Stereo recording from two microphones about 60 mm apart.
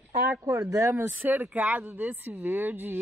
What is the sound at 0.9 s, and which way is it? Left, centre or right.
Speech, right.